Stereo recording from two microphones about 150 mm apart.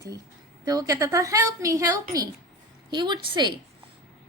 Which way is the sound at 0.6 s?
25° right (ahead or behind).